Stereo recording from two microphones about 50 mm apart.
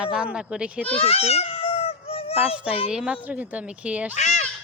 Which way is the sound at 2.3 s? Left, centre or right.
Right.